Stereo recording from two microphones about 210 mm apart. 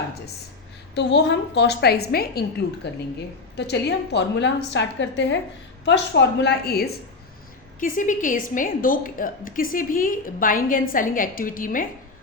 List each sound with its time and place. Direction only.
0.9 s a woman's voice: 55° left (ahead or behind)